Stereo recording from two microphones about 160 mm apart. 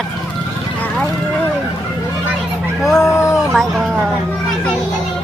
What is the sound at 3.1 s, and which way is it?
Speech, 20° left (ahead or behind).